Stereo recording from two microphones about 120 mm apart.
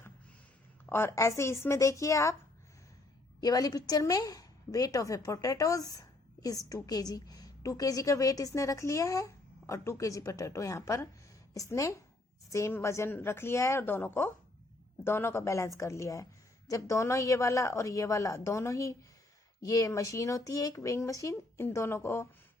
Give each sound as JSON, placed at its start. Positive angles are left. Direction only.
{"t": 0.9, "sound": "a woman's voice", "side_deg": 20}
{"t": 3.4, "sound": "a woman's voice", "side_deg": 30}